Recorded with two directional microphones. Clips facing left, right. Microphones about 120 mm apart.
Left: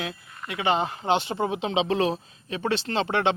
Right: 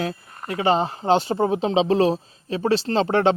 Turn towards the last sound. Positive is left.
turn(degrees=-40)  # may be behind; listen again after turning